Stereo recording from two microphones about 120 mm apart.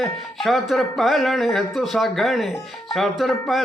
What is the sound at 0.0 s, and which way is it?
Speech, centre (ahead or behind).